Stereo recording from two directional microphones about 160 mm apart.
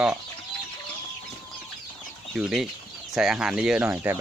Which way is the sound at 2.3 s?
5° right (ahead or behind).